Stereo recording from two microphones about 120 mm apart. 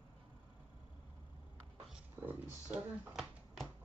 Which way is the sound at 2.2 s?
15° right (ahead or behind).